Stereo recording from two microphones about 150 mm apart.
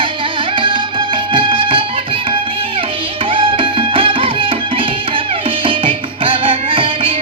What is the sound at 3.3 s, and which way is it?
Music, 35° right (ahead or behind).